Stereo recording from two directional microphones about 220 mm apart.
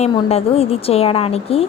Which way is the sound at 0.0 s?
30° left (ahead or behind).